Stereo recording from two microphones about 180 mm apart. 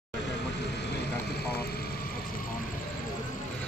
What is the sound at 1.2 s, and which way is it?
Vehicle, 65° left (ahead or behind).